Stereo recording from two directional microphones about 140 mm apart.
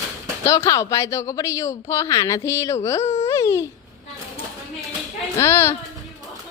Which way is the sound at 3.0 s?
50° left (ahead or behind).